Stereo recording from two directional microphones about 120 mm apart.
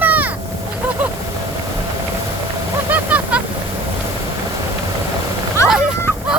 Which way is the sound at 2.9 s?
10° right (ahead or behind).